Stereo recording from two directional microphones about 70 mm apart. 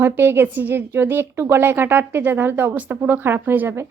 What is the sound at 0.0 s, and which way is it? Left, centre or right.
A woman's voice, right.